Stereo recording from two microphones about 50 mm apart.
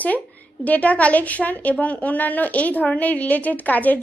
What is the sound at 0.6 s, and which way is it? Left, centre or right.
A woman's voice, left.